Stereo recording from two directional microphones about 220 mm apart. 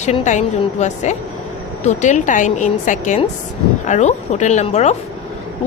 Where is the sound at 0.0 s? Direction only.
30° left (ahead or behind).